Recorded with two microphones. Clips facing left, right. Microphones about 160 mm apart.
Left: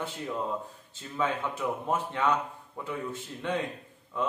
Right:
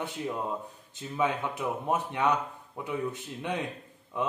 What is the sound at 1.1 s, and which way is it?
Speech, 15° right (ahead or behind).